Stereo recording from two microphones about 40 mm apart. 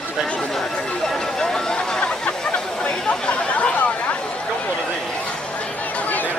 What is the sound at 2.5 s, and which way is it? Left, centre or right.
Chatter, left.